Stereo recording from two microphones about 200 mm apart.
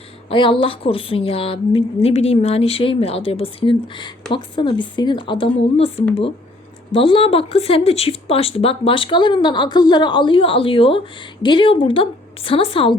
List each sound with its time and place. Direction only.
0.3 s speech: 25° left (ahead or behind)